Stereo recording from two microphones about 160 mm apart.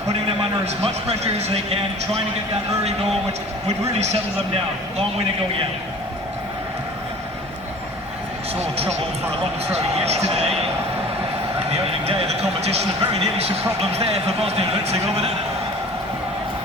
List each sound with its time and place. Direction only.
0.6 s a man's voice: 40° right (ahead or behind)
3.9 s a man's voice: 45° right (ahead or behind)
8.6 s a man's voice: 40° right (ahead or behind)
11.7 s a man's voice: 40° right (ahead or behind)